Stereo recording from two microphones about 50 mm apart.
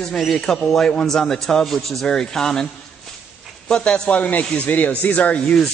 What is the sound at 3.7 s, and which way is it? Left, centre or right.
Speech, left.